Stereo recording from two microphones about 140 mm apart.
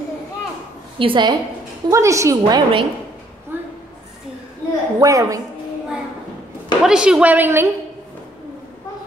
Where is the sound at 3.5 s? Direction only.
15° right (ahead or behind).